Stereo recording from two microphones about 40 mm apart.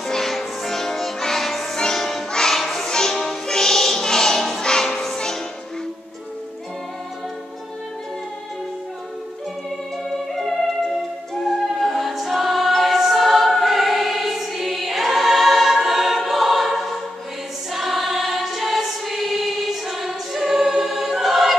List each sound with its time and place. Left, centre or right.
0.0 s music: centre
10.0 s music: centre
11.9 s choir: centre